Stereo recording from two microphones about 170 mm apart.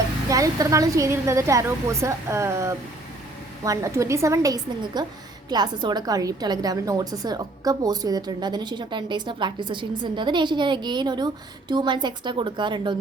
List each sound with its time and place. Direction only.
0.3 s a woman's voice: 20° right (ahead or behind)